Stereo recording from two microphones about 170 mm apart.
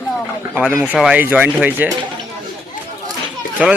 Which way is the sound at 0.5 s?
5° right (ahead or behind).